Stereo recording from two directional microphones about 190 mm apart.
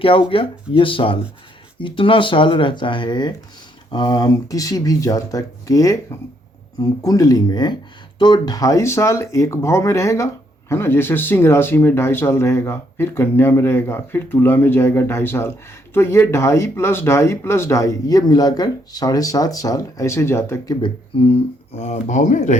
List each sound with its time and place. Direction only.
0.0 s speech: 30° left (ahead or behind)
7.0 s speech: 20° left (ahead or behind)
20.8 s speech: 30° left (ahead or behind)